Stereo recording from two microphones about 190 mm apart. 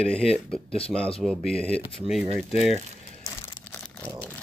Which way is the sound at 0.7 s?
30° left (ahead or behind).